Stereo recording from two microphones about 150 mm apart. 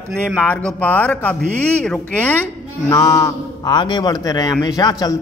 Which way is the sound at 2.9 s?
20° left (ahead or behind).